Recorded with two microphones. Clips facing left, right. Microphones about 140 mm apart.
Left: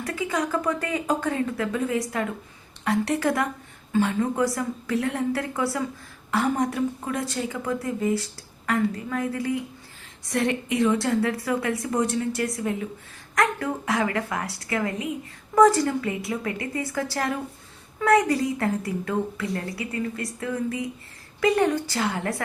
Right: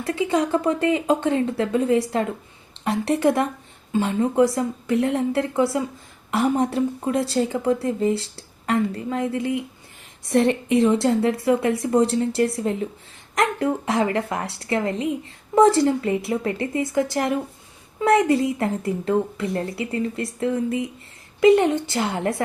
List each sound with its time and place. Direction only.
0.0 s a woman's voice: 25° right (ahead or behind)